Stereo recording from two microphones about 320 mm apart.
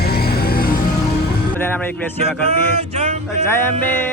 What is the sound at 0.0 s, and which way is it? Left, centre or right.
Music, left.